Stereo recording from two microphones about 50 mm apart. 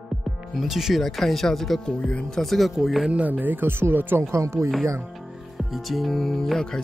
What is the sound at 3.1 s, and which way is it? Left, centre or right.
Speech, right.